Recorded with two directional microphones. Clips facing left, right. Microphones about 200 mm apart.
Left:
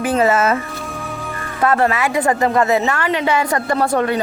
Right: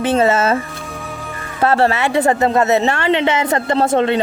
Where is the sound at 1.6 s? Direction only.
30° right (ahead or behind).